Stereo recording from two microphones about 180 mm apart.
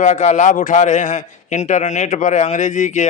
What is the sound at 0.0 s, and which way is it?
Speech, 40° left (ahead or behind).